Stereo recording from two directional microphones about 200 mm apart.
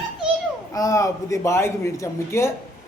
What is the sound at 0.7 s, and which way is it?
Speech, 15° left (ahead or behind).